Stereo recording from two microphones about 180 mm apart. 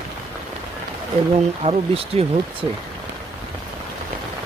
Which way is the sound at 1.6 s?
35° right (ahead or behind).